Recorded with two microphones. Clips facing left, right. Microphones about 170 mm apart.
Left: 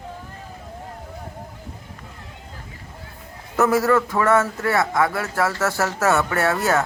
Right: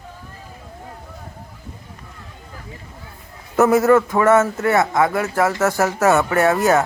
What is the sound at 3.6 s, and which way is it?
Speech, 20° right (ahead or behind).